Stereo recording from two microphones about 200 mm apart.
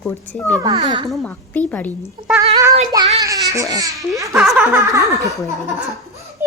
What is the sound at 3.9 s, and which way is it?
Speech, centre (ahead or behind).